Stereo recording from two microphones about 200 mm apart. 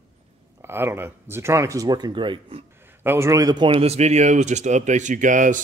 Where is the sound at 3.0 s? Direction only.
15° right (ahead or behind).